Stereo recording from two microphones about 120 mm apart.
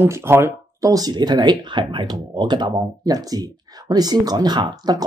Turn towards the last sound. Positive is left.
turn(degrees=-35)  # may be behind; listen again after turning